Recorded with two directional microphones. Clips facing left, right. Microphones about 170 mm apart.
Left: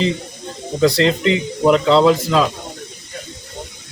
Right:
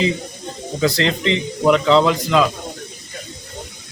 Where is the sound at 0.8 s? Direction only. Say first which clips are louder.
Left 4 dB; centre (ahead or behind).